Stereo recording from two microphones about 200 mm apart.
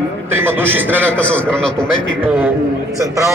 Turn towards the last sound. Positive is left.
turn(degrees=-15)  # may be behind; listen again after turning